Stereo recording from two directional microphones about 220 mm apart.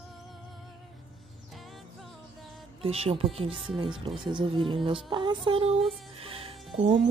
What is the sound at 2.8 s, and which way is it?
Speech, 25° right (ahead or behind).